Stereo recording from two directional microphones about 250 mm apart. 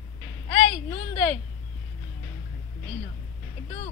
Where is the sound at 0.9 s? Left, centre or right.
Left.